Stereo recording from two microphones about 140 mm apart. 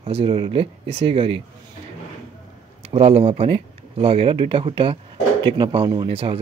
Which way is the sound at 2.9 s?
50° right (ahead or behind).